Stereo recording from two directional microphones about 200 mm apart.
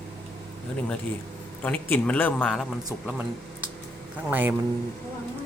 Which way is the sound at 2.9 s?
10° right (ahead or behind).